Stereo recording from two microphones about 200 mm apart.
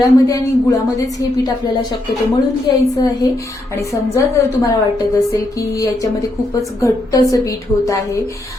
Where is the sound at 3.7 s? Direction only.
15° left (ahead or behind).